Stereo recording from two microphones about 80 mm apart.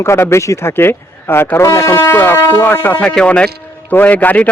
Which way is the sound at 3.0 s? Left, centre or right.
Centre.